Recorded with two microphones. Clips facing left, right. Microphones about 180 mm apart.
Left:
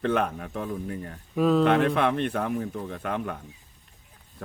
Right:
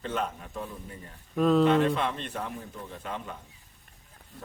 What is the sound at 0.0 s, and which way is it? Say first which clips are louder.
Speech: left 7 dB; 60° left (ahead or behind).